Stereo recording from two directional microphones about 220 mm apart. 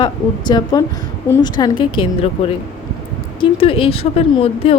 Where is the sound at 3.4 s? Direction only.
25° left (ahead or behind).